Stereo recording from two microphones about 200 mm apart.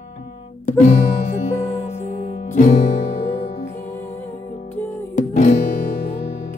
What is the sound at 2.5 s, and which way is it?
Music, 35° left (ahead or behind).